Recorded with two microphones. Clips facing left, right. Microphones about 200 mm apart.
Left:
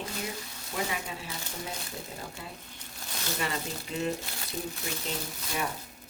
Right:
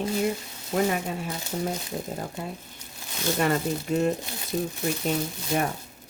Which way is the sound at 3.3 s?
50° right (ahead or behind).